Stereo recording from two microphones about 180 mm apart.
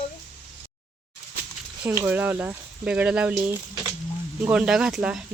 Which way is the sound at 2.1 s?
10° right (ahead or behind).